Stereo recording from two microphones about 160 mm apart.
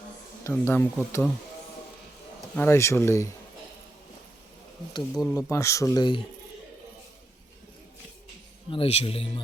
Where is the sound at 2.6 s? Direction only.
15° left (ahead or behind).